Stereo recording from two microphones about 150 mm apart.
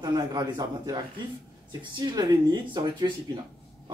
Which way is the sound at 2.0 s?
25° right (ahead or behind).